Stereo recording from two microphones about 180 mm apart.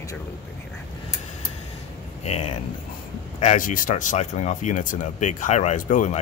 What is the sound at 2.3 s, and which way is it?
Speech, 40° left (ahead or behind).